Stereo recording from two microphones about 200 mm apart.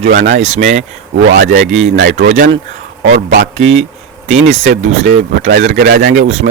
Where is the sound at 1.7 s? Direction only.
70° right (ahead or behind).